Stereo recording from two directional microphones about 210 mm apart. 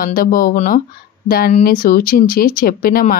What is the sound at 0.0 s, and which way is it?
Speech, 40° left (ahead or behind).